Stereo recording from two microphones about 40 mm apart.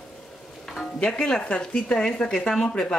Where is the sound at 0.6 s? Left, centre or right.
Centre.